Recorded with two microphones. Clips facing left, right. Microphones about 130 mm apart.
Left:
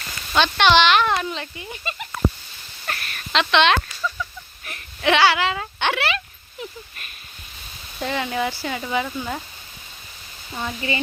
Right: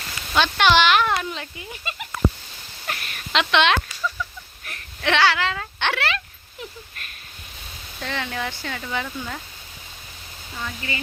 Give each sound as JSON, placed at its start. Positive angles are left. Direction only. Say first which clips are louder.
{"t": 0.3, "sound": "speech", "louder": "left 1 dB", "side_deg": -5}
{"t": 2.8, "sound": "a sound", "louder": "left 1 dB", "side_deg": -15}
{"t": 8.0, "sound": "speech", "louder": "left 5 dB", "side_deg": 10}
{"t": 10.6, "sound": "speech", "louder": "left 5 dB", "side_deg": 25}